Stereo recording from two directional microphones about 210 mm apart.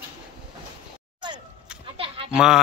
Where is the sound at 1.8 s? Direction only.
25° right (ahead or behind).